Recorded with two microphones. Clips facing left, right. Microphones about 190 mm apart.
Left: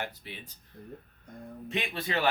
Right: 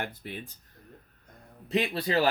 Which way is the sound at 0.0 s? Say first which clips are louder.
Right 3 dB; 50° right (ahead or behind).